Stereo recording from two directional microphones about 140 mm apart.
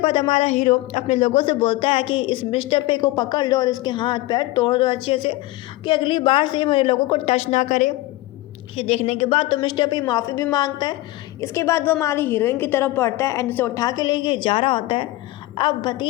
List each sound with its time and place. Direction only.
0.0 s speech: 40° left (ahead or behind); by 7.9 s 60° left (ahead or behind)
8.7 s a woman's voice: 50° left (ahead or behind); by 13.8 s 20° left (ahead or behind)
13.8 s speech: 30° left (ahead or behind)